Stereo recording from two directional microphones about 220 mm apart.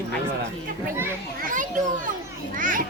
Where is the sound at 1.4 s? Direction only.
35° right (ahead or behind).